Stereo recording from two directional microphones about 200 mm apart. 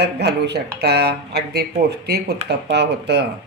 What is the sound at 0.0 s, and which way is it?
Speech, 55° right (ahead or behind).